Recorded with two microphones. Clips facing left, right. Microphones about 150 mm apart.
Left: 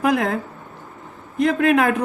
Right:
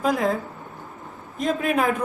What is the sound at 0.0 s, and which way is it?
Speech, 75° left (ahead or behind).